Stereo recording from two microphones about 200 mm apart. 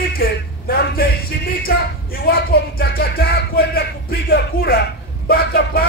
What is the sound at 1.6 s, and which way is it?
Music, 50° left (ahead or behind).